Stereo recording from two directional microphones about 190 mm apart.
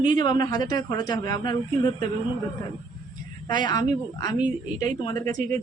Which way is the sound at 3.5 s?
25° left (ahead or behind).